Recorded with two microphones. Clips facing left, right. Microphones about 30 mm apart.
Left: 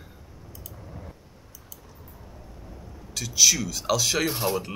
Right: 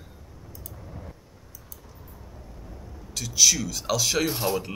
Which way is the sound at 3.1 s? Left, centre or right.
Centre.